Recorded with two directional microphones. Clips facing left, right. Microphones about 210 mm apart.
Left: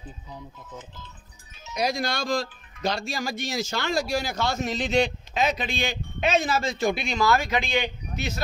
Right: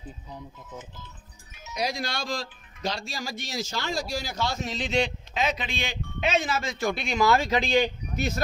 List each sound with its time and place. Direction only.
1.8 s speech: 45° left (ahead or behind); by 6.9 s 30° left (ahead or behind)
7.2 s speech: 25° right (ahead or behind); by 8.3 s 40° right (ahead or behind)